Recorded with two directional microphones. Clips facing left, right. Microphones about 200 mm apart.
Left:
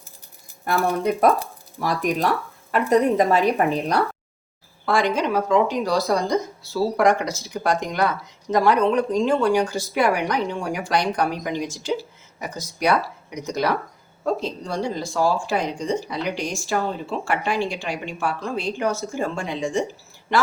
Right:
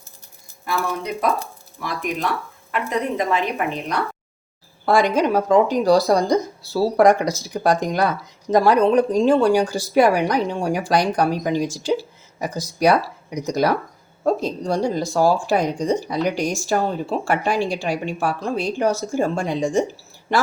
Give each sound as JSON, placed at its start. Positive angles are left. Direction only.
{"t": 0.6, "sound": "speech", "side_deg": 50}
{"t": 1.8, "sound": "a woman's voice", "side_deg": 40}
{"t": 4.9, "sound": "speech", "side_deg": -40}